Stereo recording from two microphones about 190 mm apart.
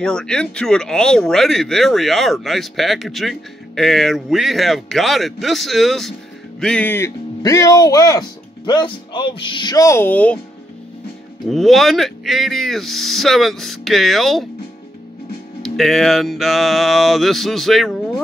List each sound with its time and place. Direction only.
0.0 s speech: 5° left (ahead or behind)
11.4 s speech: centre (ahead or behind)
15.6 s speech: centre (ahead or behind)